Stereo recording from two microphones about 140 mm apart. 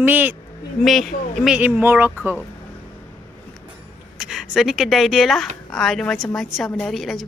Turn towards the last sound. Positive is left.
turn(degrees=0)  # may be behind; listen again after turning